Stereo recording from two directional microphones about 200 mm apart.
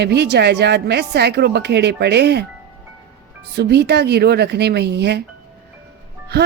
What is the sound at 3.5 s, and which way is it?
A woman's voice, 55° right (ahead or behind).